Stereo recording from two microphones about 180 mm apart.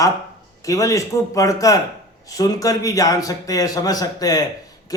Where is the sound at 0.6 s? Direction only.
20° left (ahead or behind).